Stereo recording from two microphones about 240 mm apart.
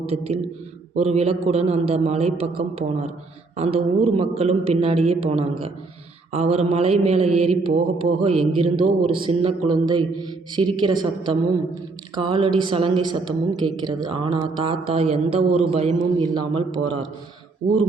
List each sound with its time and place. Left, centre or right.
0.0 s a woman's voice: right
3.5 s a woman's voice: right
17.6 s speech: right